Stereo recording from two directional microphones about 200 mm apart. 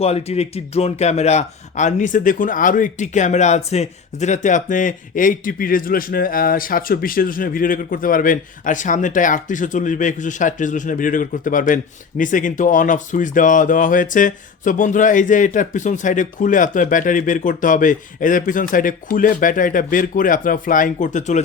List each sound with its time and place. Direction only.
0.0 s a man's voice: 30° left (ahead or behind)